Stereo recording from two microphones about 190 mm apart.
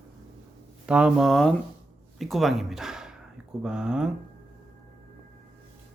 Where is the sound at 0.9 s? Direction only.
5° right (ahead or behind).